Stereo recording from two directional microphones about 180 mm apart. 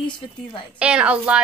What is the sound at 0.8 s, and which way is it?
Speech, 5° right (ahead or behind).